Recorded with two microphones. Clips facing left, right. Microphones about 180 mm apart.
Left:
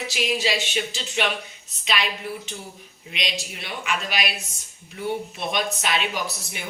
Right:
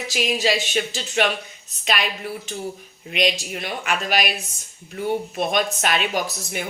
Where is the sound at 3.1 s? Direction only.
50° right (ahead or behind).